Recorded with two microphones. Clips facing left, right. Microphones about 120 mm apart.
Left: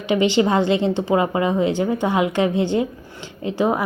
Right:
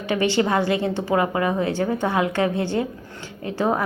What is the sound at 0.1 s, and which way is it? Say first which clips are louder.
A woman's voice: left 3 dB; 20° left (ahead or behind).